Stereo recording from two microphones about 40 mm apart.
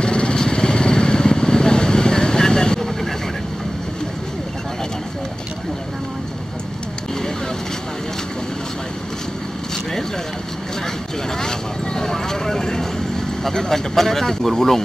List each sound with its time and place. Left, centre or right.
0.0 s vehicle: left
11.3 s vehicle: centre